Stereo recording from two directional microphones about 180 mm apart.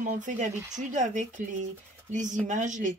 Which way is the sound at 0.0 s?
45° right (ahead or behind).